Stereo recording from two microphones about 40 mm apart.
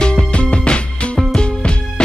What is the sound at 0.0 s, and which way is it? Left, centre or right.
Music, left.